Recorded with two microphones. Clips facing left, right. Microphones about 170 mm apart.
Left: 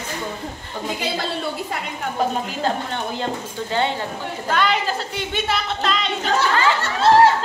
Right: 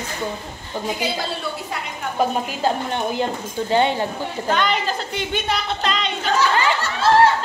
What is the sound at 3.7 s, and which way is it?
Speech, 15° right (ahead or behind).